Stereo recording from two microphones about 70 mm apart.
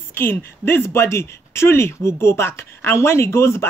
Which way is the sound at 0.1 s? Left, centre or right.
Left.